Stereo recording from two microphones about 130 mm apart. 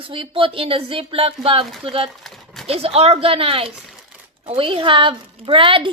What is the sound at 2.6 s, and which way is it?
A woman's voice, 50° right (ahead or behind).